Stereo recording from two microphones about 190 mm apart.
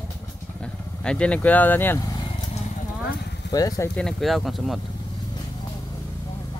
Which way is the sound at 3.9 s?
Centre (ahead or behind).